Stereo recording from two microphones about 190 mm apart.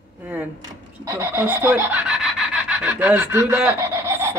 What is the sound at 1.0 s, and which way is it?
Rub, 15° right (ahead or behind).